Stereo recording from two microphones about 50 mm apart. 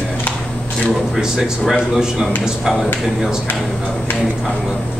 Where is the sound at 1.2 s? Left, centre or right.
Centre.